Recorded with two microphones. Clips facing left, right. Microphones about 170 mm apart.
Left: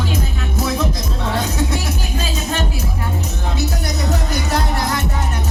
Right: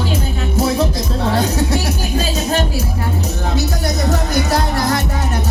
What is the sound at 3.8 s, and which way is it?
Music, 40° right (ahead or behind).